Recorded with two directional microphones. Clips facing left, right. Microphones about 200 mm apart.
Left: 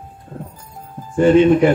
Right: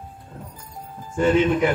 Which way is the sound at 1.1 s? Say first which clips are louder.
Left 7 dB; 30° left (ahead or behind).